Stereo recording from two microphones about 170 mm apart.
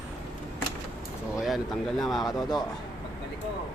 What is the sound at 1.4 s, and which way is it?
Speech, centre (ahead or behind).